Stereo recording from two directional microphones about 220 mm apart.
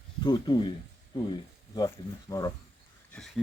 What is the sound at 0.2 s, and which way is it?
Speech, 20° left (ahead or behind).